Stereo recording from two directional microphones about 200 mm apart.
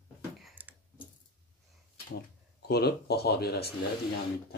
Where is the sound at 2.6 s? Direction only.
55° left (ahead or behind).